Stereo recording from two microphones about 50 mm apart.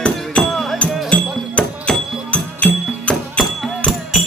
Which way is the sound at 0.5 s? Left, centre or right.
Centre.